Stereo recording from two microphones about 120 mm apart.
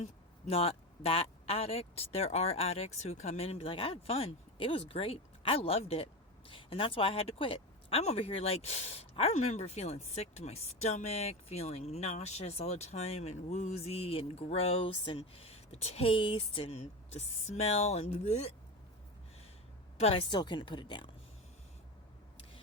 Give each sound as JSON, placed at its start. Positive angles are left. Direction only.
{"t": 0.0, "sound": "speech", "side_deg": 55}
{"t": 20.0, "sound": "speech", "side_deg": 55}
{"t": 20.2, "sound": "a woman's voice", "side_deg": 40}